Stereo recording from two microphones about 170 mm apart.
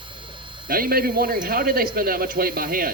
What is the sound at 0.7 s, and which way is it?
Speech, 60° right (ahead or behind).